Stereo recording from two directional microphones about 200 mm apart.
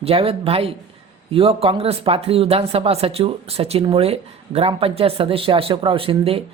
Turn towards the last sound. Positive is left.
turn(degrees=-25)  # may be behind; listen again after turning